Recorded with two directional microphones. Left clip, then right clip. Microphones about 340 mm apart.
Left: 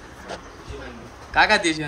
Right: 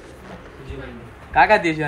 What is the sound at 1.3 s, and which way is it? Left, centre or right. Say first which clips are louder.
Speech: right 3 dB; centre.